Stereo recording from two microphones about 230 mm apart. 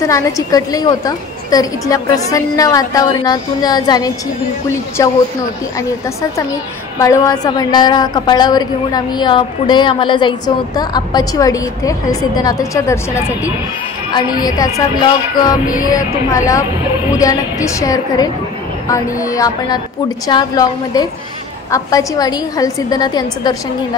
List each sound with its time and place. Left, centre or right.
0.1 s a woman's voice: centre